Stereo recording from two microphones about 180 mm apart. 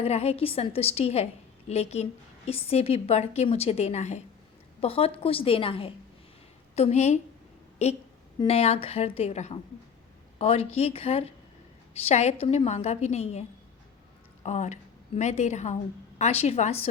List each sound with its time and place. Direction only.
0.0 s a woman's voice: 35° left (ahead or behind)
8.4 s a woman's voice: 35° left (ahead or behind)
14.4 s a woman's voice: 40° left (ahead or behind)